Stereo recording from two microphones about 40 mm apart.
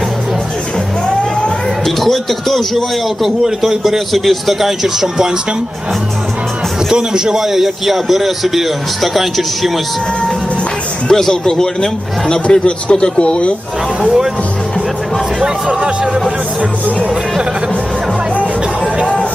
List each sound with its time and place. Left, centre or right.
1.8 s a man's voice: centre
6.9 s a man's voice: centre
11.1 s a man's voice: centre
14.0 s speech: centre
15.4 s speech: right